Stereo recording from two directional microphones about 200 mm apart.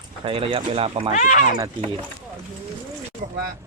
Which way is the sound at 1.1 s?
40° left (ahead or behind).